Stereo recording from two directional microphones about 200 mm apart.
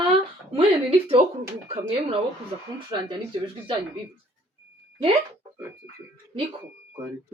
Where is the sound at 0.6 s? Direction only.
30° right (ahead or behind).